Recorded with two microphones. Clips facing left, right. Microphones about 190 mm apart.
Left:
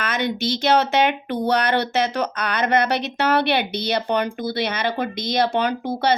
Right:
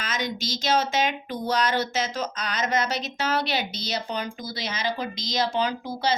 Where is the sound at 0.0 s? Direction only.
60° left (ahead or behind).